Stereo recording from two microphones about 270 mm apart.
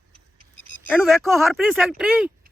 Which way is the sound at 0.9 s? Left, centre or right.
Centre.